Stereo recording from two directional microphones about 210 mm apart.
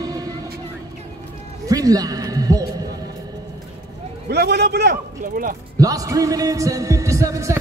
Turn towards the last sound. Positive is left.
turn(degrees=-15)  # may be behind; listen again after turning